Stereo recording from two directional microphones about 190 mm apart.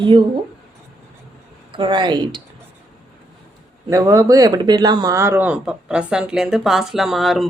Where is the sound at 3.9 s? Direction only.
15° right (ahead or behind).